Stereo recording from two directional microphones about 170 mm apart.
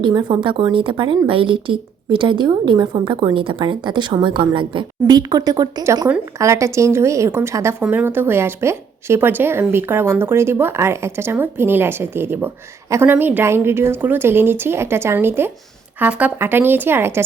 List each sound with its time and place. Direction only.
0.0 s a woman's voice: 25° right (ahead or behind)